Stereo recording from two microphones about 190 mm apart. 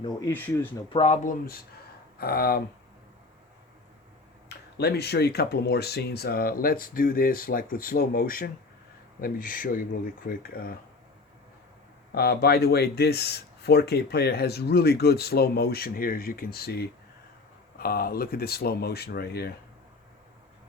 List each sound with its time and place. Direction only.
0.0 s speech: 15° left (ahead or behind)
0.9 s speech: 35° left (ahead or behind); by 2.6 s 55° left (ahead or behind)
4.4 s speech: 60° left (ahead or behind)
12.1 s speech: 55° left (ahead or behind)